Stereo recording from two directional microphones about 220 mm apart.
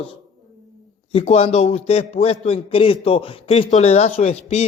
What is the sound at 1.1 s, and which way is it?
A man's voice, 30° left (ahead or behind).